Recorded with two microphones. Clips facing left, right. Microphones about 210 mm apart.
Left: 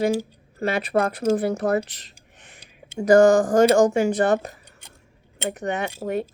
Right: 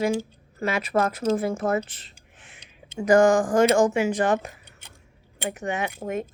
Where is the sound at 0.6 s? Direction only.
35° left (ahead or behind).